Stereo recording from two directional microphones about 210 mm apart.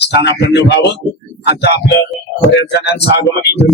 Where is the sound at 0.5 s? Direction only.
55° left (ahead or behind).